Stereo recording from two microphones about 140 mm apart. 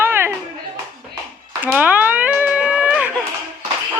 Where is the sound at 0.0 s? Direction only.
15° right (ahead or behind).